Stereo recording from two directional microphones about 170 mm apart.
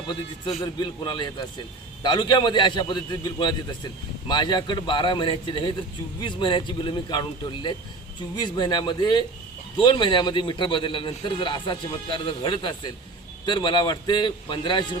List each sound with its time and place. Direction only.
0.6 s a man's voice: 25° left (ahead or behind)